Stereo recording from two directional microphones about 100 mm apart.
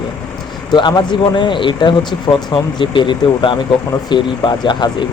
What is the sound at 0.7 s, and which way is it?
Speech, 50° left (ahead or behind).